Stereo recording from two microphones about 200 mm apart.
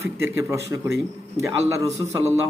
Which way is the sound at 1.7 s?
15° right (ahead or behind).